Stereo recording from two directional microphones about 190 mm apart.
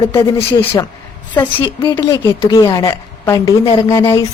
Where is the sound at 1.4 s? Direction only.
25° left (ahead or behind).